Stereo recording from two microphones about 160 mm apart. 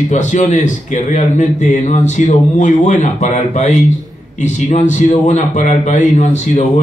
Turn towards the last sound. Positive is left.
turn(degrees=50)  # may be behind; listen again after turning